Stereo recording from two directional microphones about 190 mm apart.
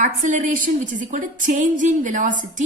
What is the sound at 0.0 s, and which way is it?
A woman's voice, 40° right (ahead or behind).